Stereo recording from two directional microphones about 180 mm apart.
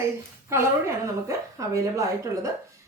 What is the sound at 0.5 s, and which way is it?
Speech, 15° right (ahead or behind).